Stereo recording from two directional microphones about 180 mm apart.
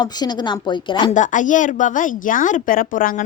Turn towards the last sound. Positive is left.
turn(degrees=50)  # may be behind; listen again after turning